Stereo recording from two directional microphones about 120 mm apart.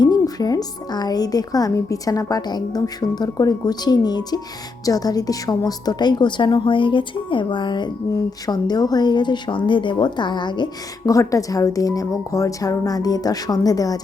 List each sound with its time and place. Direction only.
0.0 s a woman's voice: 35° left (ahead or behind)
11.1 s speech: 25° left (ahead or behind)